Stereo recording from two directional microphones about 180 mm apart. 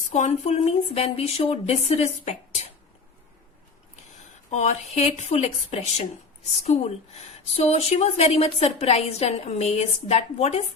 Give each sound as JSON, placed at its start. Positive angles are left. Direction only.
{"t": 0.1, "sound": "a woman's voice", "side_deg": 40}
{"t": 4.5, "sound": "a woman's voice", "side_deg": 40}